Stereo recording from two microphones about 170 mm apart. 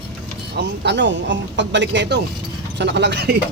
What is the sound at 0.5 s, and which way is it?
Speech, 80° right.